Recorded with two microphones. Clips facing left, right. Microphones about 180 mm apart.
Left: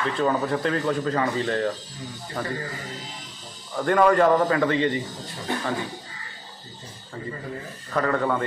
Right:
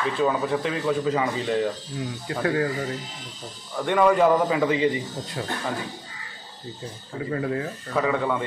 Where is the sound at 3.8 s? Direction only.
Centre (ahead or behind).